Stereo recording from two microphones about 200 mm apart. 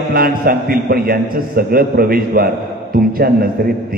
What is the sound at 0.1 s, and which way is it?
A man's voice, 45° right (ahead or behind).